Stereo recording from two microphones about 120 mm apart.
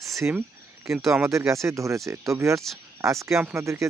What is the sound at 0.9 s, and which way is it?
Speech, 5° right (ahead or behind).